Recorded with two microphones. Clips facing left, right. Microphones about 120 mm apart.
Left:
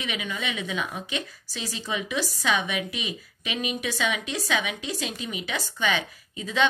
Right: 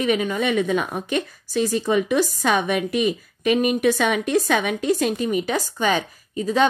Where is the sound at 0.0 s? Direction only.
45° right (ahead or behind).